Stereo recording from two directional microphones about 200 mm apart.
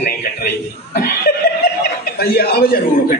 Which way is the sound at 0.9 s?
50° left (ahead or behind).